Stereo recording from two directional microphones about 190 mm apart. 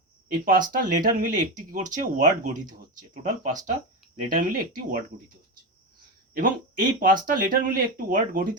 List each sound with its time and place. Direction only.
0.3 s speech: 45° right (ahead or behind)
6.3 s speech: 45° right (ahead or behind)